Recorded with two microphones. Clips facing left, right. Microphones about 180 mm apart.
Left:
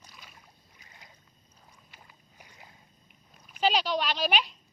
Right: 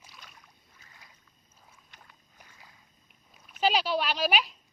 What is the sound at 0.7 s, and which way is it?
Boat, 20° left (ahead or behind).